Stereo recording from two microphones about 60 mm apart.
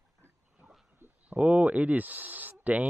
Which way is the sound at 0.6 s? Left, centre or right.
Centre.